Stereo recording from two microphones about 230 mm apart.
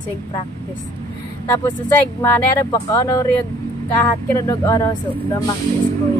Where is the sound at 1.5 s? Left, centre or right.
Centre.